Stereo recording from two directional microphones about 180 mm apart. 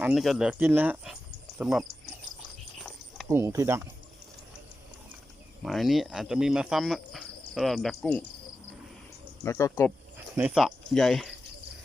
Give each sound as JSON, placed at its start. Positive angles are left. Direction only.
{"t": 0.0, "sound": "speech", "side_deg": 0}
{"t": 3.2, "sound": "speech", "side_deg": -15}
{"t": 5.6, "sound": "speech", "side_deg": 0}
{"t": 9.4, "sound": "speech", "side_deg": 15}
{"t": 10.3, "sound": "speech", "side_deg": -5}